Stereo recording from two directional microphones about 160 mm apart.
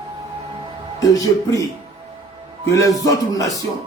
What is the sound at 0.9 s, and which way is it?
Speech, 20° left (ahead or behind).